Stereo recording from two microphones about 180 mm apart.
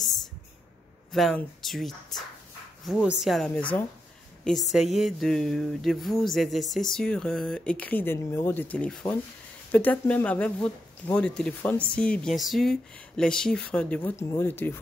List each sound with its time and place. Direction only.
1.1 s speech: centre (ahead or behind)